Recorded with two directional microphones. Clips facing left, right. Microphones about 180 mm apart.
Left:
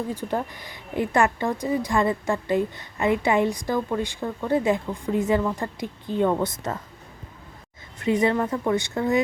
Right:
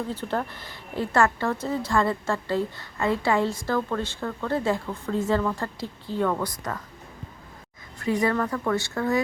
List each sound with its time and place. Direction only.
0.1 s a woman's voice: 15° left (ahead or behind)
7.9 s a woman's voice: 20° left (ahead or behind)